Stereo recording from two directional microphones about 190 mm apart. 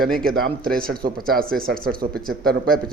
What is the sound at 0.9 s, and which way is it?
Speech, 50° right (ahead or behind).